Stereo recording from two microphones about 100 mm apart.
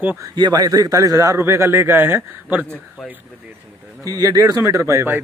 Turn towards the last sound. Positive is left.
turn(degrees=-25)  # may be behind; listen again after turning